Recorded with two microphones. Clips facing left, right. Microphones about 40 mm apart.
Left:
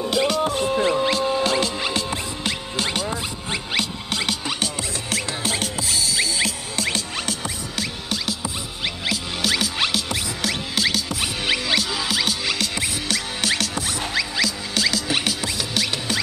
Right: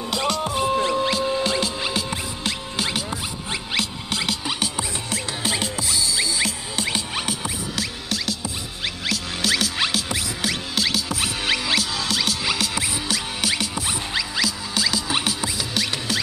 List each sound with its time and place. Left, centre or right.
0.1 s music: centre
5.6 s music: left
6.9 s music: centre
7.7 s music: centre